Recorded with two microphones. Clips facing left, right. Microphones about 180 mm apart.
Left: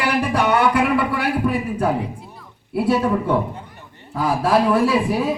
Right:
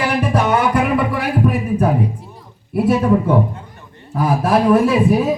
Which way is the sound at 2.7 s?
25° right (ahead or behind).